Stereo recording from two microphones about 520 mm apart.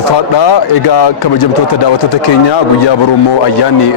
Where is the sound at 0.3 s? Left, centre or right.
Left.